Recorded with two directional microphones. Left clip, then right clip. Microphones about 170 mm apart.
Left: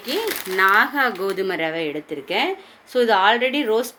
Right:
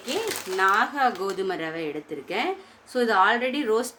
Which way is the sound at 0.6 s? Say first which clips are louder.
Left 5 dB; 25° left (ahead or behind).